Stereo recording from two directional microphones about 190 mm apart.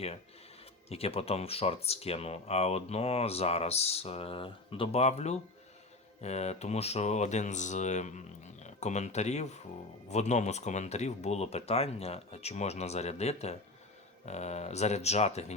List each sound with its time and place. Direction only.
0.9 s speech: 30° left (ahead or behind)